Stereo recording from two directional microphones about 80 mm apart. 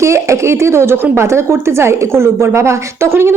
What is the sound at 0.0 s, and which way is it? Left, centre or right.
A woman's voice, right.